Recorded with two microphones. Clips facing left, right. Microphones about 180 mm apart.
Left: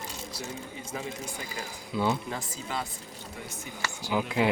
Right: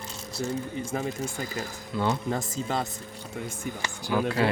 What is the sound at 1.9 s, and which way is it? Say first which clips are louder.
Speech: even; 10° left (ahead or behind).